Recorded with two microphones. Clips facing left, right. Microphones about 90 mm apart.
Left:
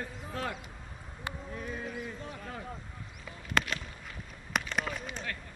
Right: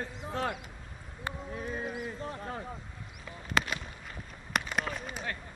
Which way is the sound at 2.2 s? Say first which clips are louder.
Right 4 dB; 35° right (ahead or behind).